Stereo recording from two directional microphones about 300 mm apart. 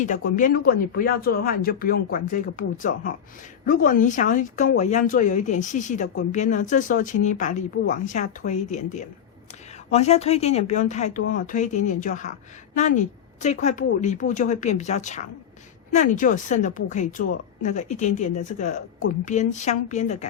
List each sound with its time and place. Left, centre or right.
0.3 s a woman's voice: left